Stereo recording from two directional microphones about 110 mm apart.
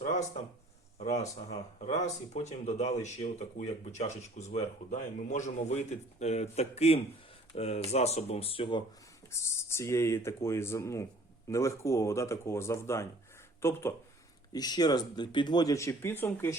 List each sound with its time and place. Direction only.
0.0 s a sound: 90° left
0.9 s speech: 90° left; by 8.8 s 55° left (ahead or behind)
9.3 s speech: 25° left (ahead or behind)
14.5 s speech: 40° left (ahead or behind); by 16.6 s 20° left (ahead or behind)